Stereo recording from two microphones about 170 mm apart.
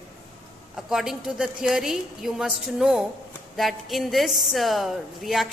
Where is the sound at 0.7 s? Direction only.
5° right (ahead or behind).